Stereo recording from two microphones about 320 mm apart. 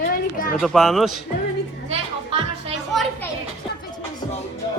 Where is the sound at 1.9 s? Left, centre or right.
Centre.